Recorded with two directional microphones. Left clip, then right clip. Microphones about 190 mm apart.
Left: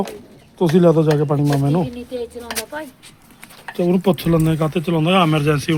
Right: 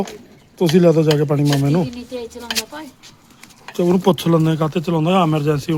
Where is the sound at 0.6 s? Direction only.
5° right (ahead or behind).